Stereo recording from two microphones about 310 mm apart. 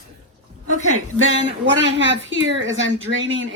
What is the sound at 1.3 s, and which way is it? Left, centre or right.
Speech, right.